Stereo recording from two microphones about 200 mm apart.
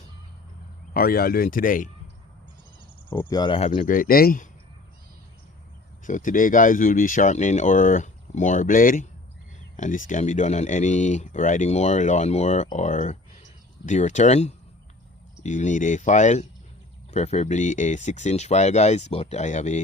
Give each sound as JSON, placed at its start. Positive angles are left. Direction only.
{"t": 0.9, "sound": "speech", "side_deg": 50}
{"t": 3.1, "sound": "speech", "side_deg": 15}
{"t": 3.8, "sound": "speech", "side_deg": 45}
{"t": 6.1, "sound": "speech", "side_deg": 40}